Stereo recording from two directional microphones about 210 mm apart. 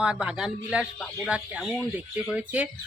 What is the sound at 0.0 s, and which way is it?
Speech, 5° right (ahead or behind).